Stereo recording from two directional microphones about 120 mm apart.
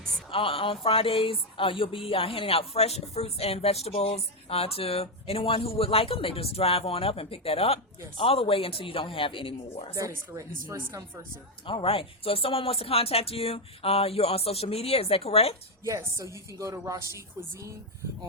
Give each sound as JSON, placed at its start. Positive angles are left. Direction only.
{"t": 0.3, "sound": "speech", "side_deg": 50}
{"t": 9.9, "sound": "speech", "side_deg": -25}
{"t": 11.6, "sound": "speech", "side_deg": 50}
{"t": 15.8, "sound": "speech", "side_deg": -25}